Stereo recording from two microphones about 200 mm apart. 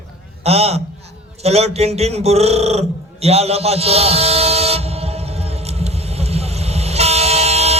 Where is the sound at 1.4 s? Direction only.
30° right (ahead or behind).